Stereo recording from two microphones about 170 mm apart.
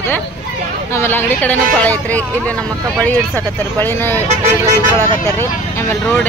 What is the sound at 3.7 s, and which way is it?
Speech, 10° left (ahead or behind).